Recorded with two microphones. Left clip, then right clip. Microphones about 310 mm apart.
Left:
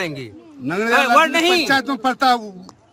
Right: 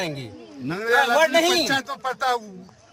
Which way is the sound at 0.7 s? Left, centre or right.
Left.